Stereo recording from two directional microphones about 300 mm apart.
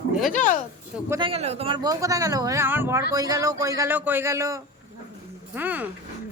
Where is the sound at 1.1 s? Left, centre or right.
Centre.